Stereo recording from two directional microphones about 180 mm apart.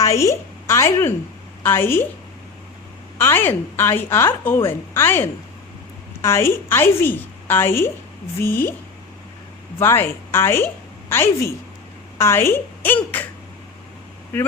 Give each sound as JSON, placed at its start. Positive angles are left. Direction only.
{"t": 0.1, "sound": "a woman's voice", "side_deg": 15}
{"t": 3.2, "sound": "a woman's voice", "side_deg": 10}
{"t": 9.7, "sound": "a woman's voice", "side_deg": 10}